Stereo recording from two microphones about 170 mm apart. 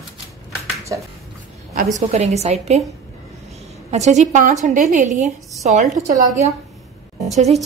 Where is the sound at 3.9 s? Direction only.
40° right (ahead or behind).